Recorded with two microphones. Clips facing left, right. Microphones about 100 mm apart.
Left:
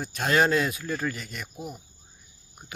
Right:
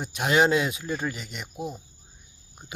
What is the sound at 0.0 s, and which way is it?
Speech, 15° right (ahead or behind).